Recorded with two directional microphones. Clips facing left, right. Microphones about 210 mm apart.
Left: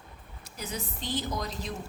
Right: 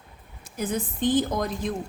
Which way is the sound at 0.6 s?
50° right (ahead or behind).